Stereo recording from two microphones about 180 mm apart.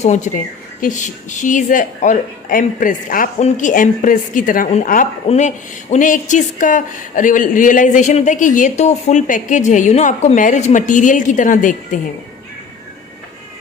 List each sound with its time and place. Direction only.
0.0 s speech: 45° left (ahead or behind)